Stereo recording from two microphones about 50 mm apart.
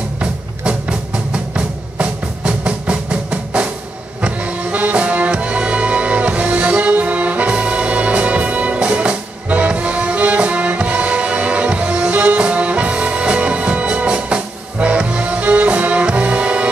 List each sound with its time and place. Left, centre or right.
0.2 s music: right